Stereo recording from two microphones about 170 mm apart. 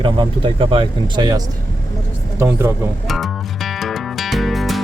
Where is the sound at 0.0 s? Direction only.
30° right (ahead or behind).